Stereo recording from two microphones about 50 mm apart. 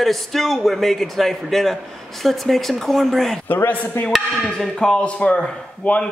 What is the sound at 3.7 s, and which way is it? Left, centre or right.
Speech, left.